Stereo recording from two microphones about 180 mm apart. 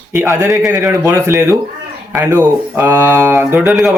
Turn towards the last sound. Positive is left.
turn(degrees=-5)  # may be behind; listen again after turning